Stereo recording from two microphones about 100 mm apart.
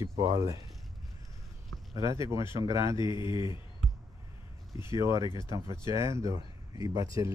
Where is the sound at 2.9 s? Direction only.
50° left (ahead or behind).